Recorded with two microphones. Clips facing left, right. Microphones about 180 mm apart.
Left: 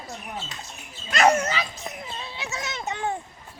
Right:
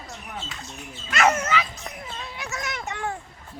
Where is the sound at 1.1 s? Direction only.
35° left (ahead or behind).